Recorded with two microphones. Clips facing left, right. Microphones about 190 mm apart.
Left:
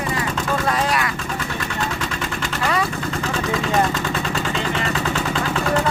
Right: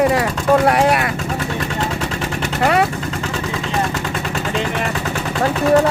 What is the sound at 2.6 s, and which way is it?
Vehicle, 60° right (ahead or behind).